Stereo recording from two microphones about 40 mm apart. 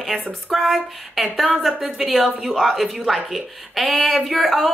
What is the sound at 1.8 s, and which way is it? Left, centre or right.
A woman's voice, centre.